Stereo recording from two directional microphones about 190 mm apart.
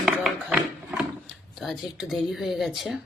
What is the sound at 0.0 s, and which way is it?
Music, centre (ahead or behind).